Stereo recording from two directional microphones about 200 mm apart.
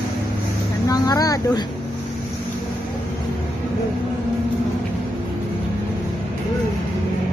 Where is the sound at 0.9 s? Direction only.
20° left (ahead or behind).